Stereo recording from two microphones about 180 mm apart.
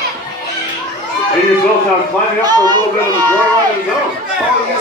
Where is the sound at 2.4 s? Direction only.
20° right (ahead or behind).